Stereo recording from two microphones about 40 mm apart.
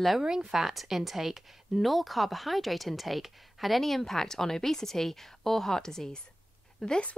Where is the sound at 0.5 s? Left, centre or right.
Centre.